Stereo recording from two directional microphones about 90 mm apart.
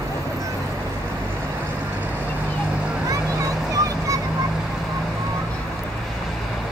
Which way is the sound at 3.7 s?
40° right (ahead or behind).